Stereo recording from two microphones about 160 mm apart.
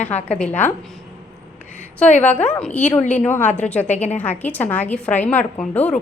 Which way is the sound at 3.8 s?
45° left (ahead or behind).